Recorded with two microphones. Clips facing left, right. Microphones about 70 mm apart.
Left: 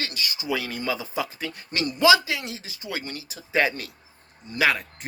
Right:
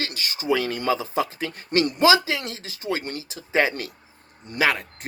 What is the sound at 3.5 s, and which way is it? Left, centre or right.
Speech, right.